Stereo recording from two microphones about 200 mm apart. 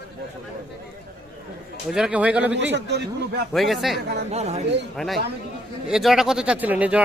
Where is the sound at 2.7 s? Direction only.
55° right (ahead or behind).